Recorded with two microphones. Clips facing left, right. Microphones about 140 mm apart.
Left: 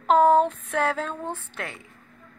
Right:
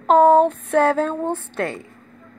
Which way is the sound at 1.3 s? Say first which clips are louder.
Right 10 dB; 30° right (ahead or behind).